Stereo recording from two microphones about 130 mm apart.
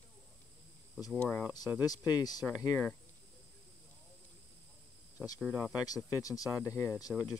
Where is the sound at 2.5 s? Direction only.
15° left (ahead or behind).